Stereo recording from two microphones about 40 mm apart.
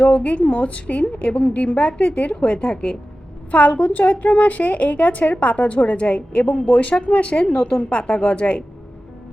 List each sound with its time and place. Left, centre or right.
0.1 s a woman's voice: left
2.3 s a woman's voice: left
3.5 s a woman's voice: left